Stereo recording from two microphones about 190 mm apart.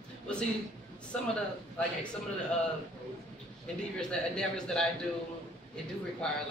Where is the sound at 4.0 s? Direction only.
5° left (ahead or behind).